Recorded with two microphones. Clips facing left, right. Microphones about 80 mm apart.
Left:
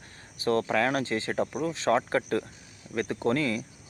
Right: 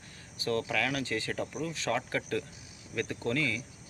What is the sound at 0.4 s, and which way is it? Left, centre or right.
Speech, left.